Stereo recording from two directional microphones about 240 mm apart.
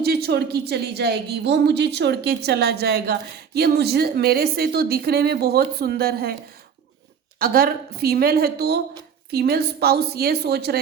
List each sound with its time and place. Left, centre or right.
0.0 s a woman's voice: right
7.3 s a woman's voice: right